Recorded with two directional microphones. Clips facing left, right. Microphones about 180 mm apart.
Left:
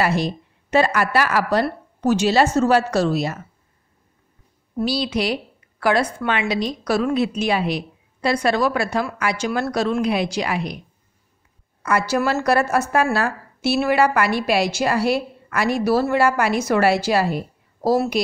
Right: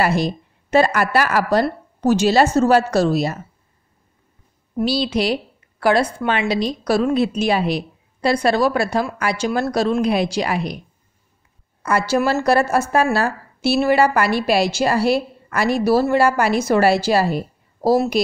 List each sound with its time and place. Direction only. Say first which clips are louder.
0.0 s a woman's voice: right 2 dB; 40° right (ahead or behind)
4.8 s a woman's voice: right 3 dB; 30° right (ahead or behind)
11.8 s a woman's voice: right 2 dB; 30° right (ahead or behind)